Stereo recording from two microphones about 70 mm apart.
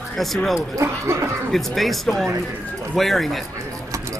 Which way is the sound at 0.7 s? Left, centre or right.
Right.